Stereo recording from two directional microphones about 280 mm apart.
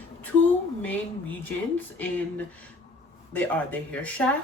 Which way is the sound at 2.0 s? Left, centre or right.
Centre.